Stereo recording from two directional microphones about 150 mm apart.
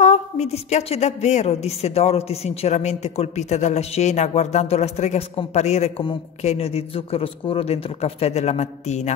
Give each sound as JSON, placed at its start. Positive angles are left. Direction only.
{"t": 0.0, "sound": "a woman's voice", "side_deg": 50}